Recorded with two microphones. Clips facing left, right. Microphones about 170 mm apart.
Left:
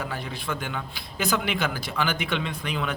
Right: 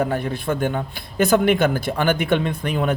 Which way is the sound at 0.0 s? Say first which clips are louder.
Right 10 dB; 50° right (ahead or behind).